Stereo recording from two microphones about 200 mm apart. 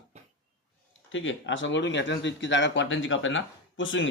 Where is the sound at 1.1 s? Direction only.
70° left (ahead or behind).